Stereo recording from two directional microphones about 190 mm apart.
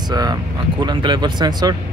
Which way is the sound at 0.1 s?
20° right (ahead or behind).